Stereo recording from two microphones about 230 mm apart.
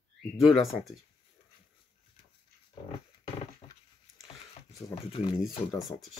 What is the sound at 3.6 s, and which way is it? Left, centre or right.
Patter, left.